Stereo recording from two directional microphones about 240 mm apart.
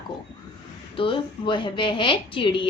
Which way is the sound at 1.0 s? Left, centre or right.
Left.